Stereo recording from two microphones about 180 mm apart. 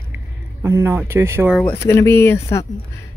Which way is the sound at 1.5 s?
10° left (ahead or behind).